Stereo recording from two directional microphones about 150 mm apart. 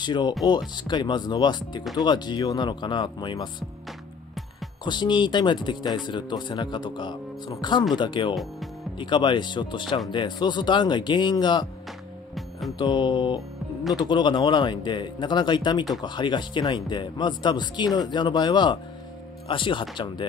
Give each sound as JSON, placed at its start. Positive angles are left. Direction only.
{"t": 0.0, "sound": "speech", "side_deg": 30}
{"t": 4.8, "sound": "speech", "side_deg": 30}
{"t": 12.4, "sound": "music", "side_deg": 0}
{"t": 12.7, "sound": "speech", "side_deg": 30}